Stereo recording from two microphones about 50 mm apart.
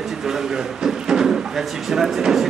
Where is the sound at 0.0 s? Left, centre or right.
Centre.